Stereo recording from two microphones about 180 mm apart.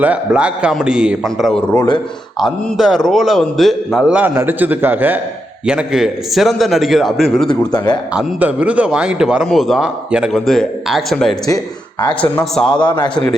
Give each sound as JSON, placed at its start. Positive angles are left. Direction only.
{"t": 0.0, "sound": "a man's voice", "side_deg": -5}
{"t": 7.6, "sound": "a man's voice", "side_deg": 25}
{"t": 8.1, "sound": "a man's voice", "side_deg": -10}
{"t": 11.4, "sound": "speech", "side_deg": 20}
{"t": 12.2, "sound": "a man's voice", "side_deg": 5}
{"t": 12.8, "sound": "a man's voice", "side_deg": 25}